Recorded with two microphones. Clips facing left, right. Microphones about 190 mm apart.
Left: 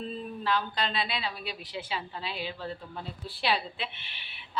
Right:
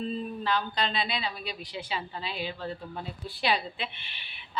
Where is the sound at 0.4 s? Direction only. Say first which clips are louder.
Left 1 dB; 5° left (ahead or behind).